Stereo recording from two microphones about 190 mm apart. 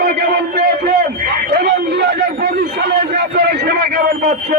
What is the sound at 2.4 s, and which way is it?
A man's voice, 60° right (ahead or behind).